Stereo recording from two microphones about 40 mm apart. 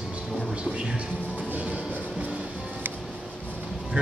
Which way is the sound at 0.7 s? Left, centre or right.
Right.